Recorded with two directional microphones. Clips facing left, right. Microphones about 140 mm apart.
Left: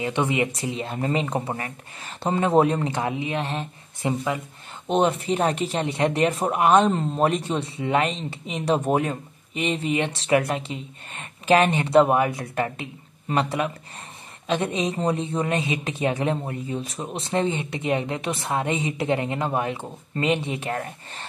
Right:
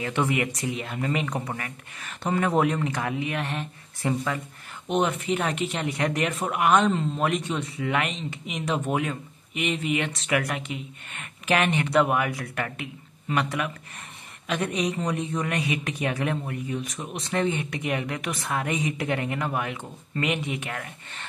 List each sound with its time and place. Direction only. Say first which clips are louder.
0.0 s a woman's voice: left 2 dB; 20° left (ahead or behind)
4.8 s a woman's voice: left 3 dB; 30° left (ahead or behind)